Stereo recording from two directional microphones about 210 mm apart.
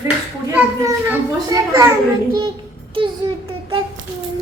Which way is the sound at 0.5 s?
10° right (ahead or behind).